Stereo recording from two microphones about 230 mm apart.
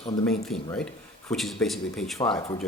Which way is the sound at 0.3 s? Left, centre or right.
Centre.